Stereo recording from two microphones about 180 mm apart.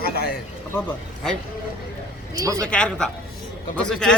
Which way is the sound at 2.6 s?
5° left (ahead or behind).